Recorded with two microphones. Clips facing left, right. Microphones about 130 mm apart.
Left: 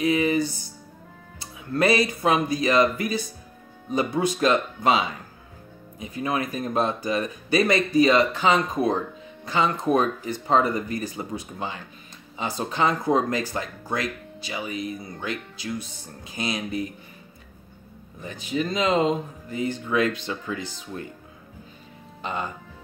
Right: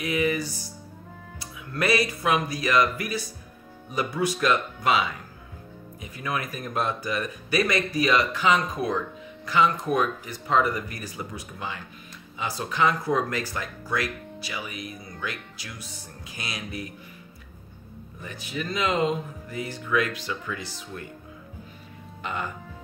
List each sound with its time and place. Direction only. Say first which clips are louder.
0.0 s speech: left 4 dB; 25° left (ahead or behind)
18.2 s speech: left 6 dB; 20° left (ahead or behind)
22.2 s speech: left 2 dB; 25° left (ahead or behind)